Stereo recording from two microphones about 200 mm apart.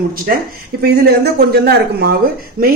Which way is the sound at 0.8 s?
50° right (ahead or behind).